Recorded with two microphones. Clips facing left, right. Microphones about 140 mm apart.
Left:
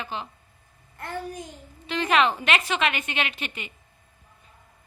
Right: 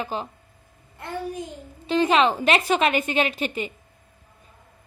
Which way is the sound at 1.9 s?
30° right (ahead or behind).